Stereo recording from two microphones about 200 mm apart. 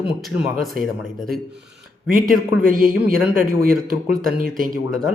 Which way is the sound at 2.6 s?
45° right (ahead or behind).